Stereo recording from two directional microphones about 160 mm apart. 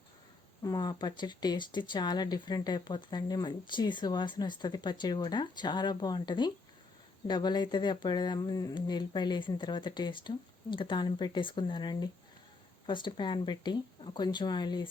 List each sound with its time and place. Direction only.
0.6 s speech: 25° left (ahead or behind)